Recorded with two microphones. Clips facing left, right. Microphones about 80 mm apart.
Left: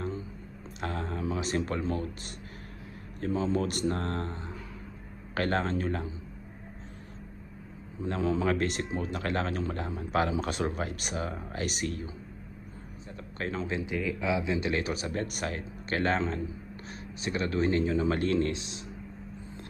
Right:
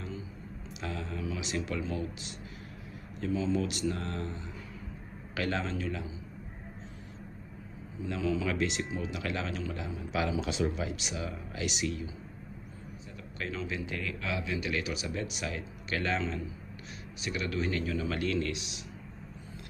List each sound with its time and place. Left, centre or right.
0.7 s a sound: left
3.2 s speech: left
8.0 s speech: left
13.4 s speech: left
13.8 s speech: centre; by 18.9 s left